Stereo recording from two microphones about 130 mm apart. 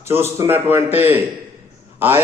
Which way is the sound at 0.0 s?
20° right (ahead or behind).